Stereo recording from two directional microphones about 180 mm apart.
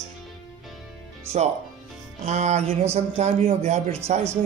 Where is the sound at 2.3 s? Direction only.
40° right (ahead or behind).